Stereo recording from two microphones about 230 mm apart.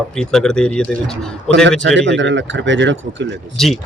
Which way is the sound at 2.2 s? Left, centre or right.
Right.